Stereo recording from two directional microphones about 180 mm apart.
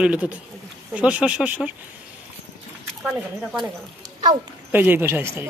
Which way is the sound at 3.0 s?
5° right (ahead or behind).